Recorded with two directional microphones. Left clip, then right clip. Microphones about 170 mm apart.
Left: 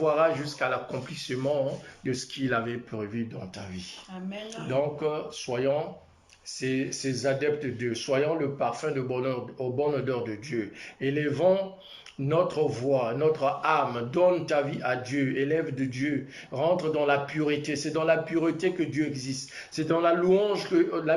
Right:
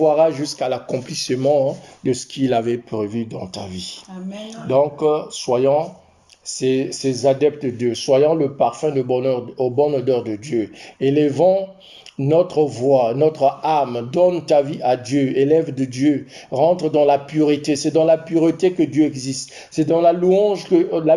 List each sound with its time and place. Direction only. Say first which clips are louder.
0.0 s speech: right 9 dB; 25° right (ahead or behind)